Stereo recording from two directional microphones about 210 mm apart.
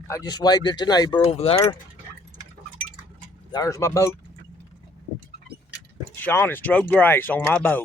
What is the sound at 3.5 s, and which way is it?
Speech, 15° left (ahead or behind).